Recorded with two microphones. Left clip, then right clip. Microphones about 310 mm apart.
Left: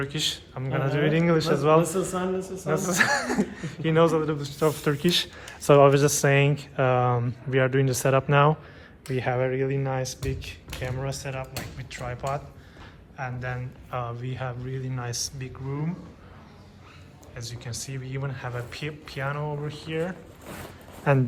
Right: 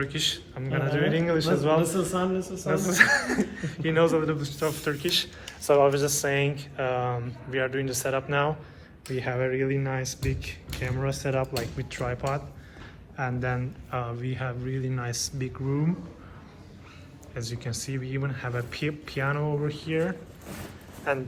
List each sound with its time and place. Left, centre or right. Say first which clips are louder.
0.0 s speech: even; centre
17.3 s speech: right 2 dB; centre
21.1 s speech: left 4 dB; left